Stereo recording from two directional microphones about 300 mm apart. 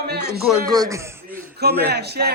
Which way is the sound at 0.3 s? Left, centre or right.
Centre.